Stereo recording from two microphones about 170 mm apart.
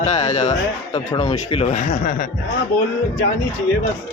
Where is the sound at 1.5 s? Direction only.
40° left (ahead or behind).